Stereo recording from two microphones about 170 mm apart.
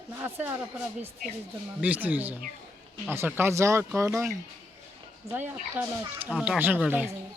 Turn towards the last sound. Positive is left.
turn(degrees=-10)  # may be behind; listen again after turning